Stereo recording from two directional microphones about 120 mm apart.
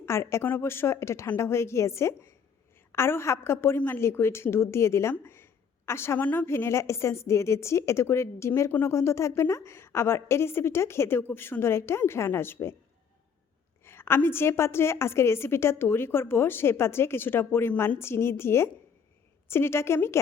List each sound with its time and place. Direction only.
0.0 s a woman's voice: 20° left (ahead or behind)
13.8 s a woman's voice: 20° left (ahead or behind)